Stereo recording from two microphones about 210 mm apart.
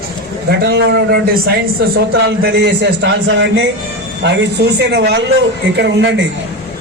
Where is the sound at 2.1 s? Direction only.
50° right (ahead or behind).